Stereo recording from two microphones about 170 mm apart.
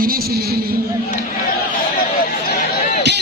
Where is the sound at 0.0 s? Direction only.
60° right (ahead or behind).